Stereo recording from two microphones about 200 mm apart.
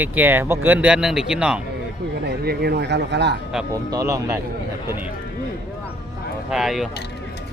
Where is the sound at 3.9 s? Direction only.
15° right (ahead or behind).